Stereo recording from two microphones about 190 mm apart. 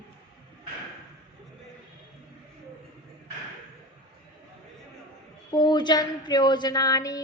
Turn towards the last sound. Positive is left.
turn(degrees=20)  # may be behind; listen again after turning